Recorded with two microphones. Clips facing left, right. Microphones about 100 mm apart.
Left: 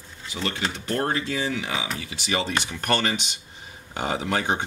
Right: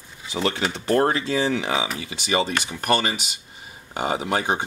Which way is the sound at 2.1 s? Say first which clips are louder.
Right 3 dB; 15° right (ahead or behind).